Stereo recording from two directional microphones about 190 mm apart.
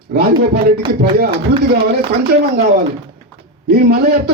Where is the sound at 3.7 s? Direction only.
55° right (ahead or behind).